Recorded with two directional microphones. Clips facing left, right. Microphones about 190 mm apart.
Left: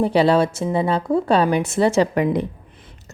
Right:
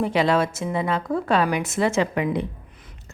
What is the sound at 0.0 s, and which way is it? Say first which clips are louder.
A woman's voice: left 4 dB; 35° left (ahead or behind).